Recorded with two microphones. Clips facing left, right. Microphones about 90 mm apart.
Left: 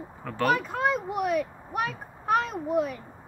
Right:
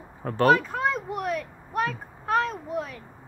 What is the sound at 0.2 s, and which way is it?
Speech, 40° right (ahead or behind).